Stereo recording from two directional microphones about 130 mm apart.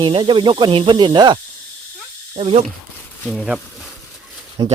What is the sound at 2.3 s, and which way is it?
Speech, 55° right (ahead or behind).